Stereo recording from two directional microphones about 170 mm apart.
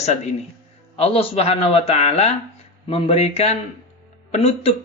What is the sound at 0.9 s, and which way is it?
Speech, 35° left (ahead or behind).